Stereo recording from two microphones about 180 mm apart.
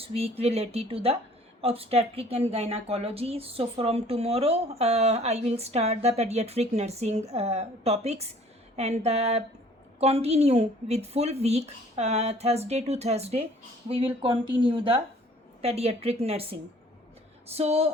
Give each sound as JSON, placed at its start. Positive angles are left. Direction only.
{"t": 0.0, "sound": "a woman's voice", "side_deg": -35}